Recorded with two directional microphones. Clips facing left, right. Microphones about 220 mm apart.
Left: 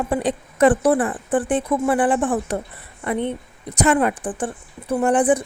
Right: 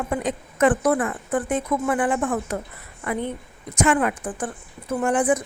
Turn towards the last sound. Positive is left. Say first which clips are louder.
# left 3 dB
turn(degrees=30)  # may be behind; listen again after turning